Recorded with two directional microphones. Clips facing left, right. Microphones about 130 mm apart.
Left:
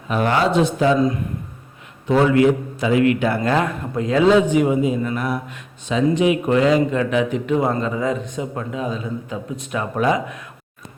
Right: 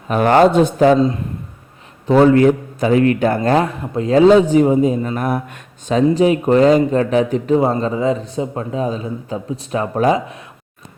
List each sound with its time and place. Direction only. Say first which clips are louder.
0.1 s speech: right 6 dB; 50° right (ahead or behind)
0.9 s speech: right 3 dB; 30° right (ahead or behind)
2.0 s a man's voice: right 4 dB; 40° right (ahead or behind)